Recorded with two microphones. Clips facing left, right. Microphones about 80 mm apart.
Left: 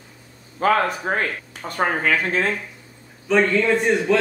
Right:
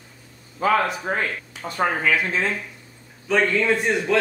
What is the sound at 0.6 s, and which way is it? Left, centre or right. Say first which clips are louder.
Speech: left 1 dB; left.